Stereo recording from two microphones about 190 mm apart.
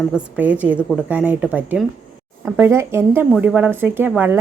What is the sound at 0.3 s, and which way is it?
A woman's voice, 10° right (ahead or behind).